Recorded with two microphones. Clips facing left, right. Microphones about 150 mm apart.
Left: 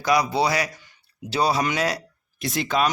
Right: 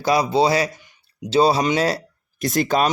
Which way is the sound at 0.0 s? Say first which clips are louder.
Right 3 dB; 30° right (ahead or behind).